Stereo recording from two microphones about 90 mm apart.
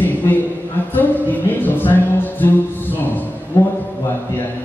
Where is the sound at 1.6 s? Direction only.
20° left (ahead or behind).